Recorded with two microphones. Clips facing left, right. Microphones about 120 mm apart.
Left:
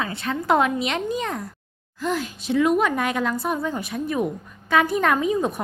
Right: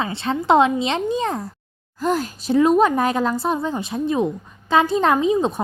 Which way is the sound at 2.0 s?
40° right (ahead or behind).